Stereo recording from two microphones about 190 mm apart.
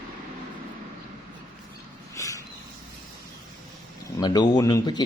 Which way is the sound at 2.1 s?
15° left (ahead or behind).